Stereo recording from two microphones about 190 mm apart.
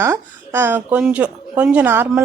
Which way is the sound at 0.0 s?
15° right (ahead or behind).